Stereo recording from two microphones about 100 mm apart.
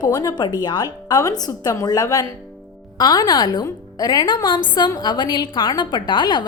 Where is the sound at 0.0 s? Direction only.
40° left (ahead or behind).